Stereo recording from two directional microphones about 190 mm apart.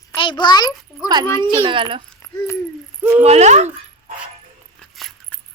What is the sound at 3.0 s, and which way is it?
Speech, 5° right (ahead or behind).